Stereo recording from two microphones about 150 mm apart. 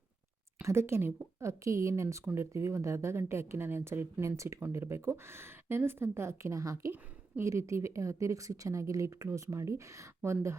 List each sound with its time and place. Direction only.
0.6 s a woman's voice: 15° right (ahead or behind)